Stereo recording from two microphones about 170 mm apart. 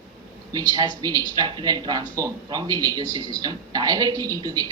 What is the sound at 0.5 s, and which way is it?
A woman's voice, 20° right (ahead or behind).